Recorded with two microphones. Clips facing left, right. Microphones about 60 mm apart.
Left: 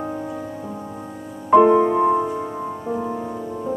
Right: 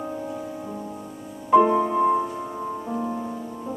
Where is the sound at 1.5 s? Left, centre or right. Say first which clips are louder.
Left 4 dB; left.